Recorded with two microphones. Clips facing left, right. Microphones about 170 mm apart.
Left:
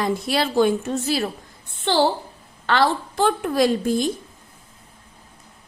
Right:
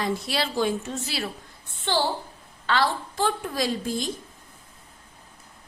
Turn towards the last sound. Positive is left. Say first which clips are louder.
# left 8 dB
turn(degrees=55)  # may be behind; listen again after turning